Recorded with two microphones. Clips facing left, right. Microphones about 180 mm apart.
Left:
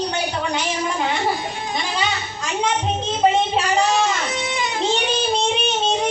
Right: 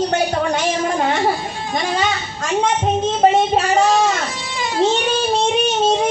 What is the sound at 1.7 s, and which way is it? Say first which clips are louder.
Speech: right 6 dB; 45° right (ahead or behind).